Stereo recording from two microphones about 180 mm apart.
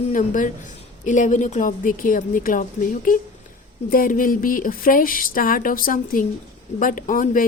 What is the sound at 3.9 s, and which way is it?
A woman's voice, 50° left (ahead or behind).